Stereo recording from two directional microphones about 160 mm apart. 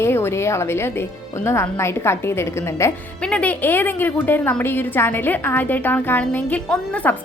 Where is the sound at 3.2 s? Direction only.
5° left (ahead or behind).